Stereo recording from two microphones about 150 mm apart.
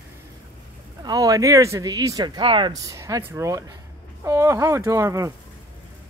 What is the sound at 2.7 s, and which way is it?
Speech, 20° right (ahead or behind).